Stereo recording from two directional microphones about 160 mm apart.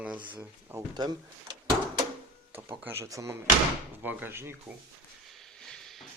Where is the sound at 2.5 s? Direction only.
15° right (ahead or behind).